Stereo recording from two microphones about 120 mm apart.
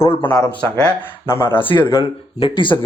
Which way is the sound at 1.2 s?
20° left (ahead or behind).